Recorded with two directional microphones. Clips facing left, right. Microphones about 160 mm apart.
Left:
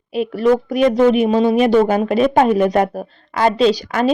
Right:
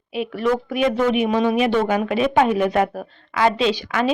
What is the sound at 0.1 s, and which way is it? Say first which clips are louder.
Speech: left 6 dB; 35° left (ahead or behind).